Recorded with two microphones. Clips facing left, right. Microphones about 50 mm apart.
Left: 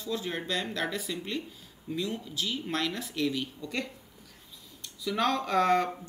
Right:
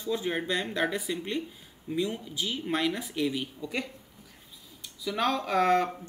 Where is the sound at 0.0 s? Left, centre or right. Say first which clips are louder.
Right 3 dB; centre.